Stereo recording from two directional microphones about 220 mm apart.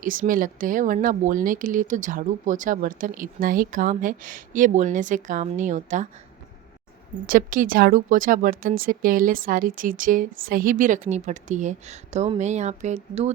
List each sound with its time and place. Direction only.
0.0 s speech: 40° right (ahead or behind)
7.3 s speech: 40° right (ahead or behind)